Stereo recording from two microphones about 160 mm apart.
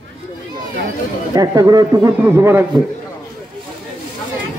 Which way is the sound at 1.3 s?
20° right (ahead or behind).